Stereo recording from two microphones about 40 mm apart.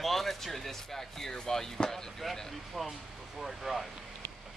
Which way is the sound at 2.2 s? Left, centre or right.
Centre.